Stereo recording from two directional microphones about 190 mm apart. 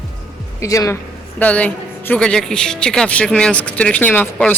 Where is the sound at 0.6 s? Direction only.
15° left (ahead or behind).